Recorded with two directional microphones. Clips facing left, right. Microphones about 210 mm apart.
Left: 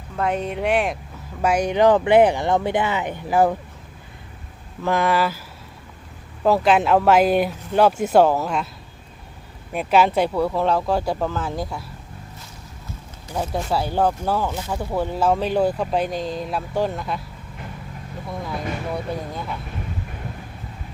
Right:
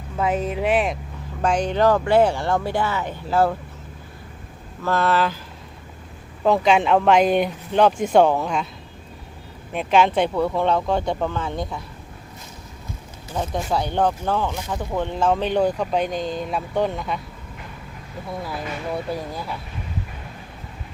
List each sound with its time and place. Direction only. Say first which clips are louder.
0.2 s speech: right 1 dB; 5° right (ahead or behind); by 3.5 s 15° left (ahead or behind)
4.8 s speech: even; 15° left (ahead or behind)
6.4 s speech: even; 5° left (ahead or behind)
9.7 s speech: even; 5° left (ahead or behind)
13.3 s speech: even; 5° left (ahead or behind)
18.3 s speech: left 1 dB; centre (ahead or behind)